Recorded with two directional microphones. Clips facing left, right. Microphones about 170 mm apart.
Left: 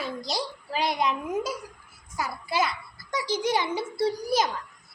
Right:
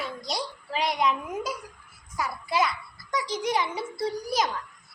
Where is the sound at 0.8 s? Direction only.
25° left (ahead or behind).